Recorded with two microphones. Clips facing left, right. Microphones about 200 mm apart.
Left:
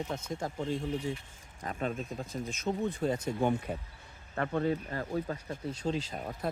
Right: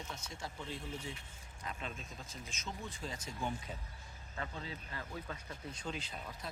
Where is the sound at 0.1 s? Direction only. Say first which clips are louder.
Left 11 dB; 55° left (ahead or behind).